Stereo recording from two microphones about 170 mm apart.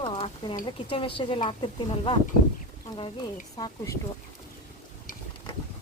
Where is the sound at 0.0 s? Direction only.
30° left (ahead or behind).